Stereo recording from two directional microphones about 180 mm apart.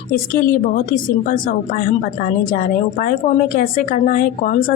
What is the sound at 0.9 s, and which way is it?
A woman's voice, 50° left (ahead or behind).